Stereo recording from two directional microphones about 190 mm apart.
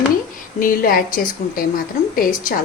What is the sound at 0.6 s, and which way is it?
A woman's voice, 50° left (ahead or behind).